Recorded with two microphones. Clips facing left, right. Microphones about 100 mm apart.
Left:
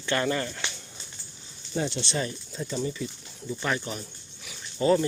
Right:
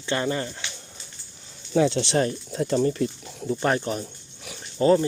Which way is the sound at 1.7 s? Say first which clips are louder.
Right 9 dB; 90° right.